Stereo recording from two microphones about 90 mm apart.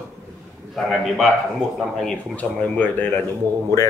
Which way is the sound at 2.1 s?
15° left (ahead or behind).